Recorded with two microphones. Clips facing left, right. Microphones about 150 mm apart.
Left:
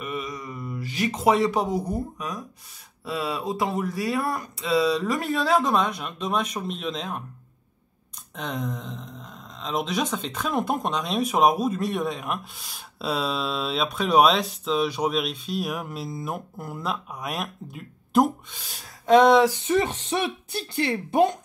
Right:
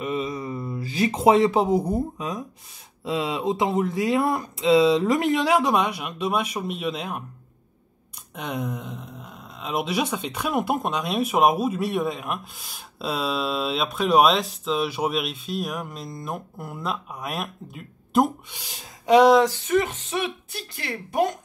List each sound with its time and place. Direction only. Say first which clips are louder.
0.0 s speech: right 5 dB; 25° right (ahead or behind); by 7.2 s 10° right (ahead or behind)
8.4 s speech: right 1 dB; 10° right (ahead or behind)
18.5 s speech: right 2 dB; 10° right (ahead or behind)
19.5 s speech: even; 25° left (ahead or behind)